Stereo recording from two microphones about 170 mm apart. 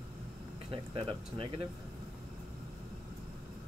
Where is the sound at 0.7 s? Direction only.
30° right (ahead or behind).